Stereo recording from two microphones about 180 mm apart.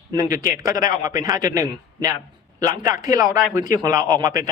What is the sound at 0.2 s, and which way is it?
Speech, 20° right (ahead or behind).